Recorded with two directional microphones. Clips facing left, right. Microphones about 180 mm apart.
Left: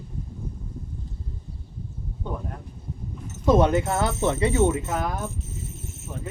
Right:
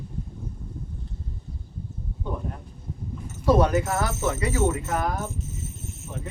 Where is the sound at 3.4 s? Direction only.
25° left (ahead or behind).